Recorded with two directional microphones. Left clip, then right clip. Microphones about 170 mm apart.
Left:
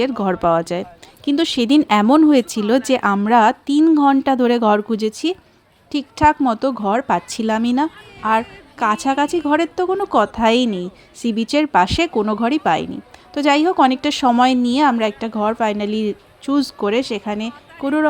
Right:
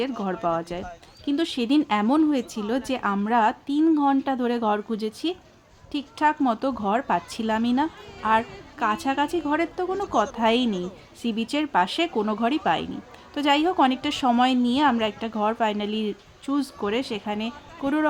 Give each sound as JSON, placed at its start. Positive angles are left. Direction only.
{"t": 0.0, "sound": "a woman's voice", "side_deg": 45}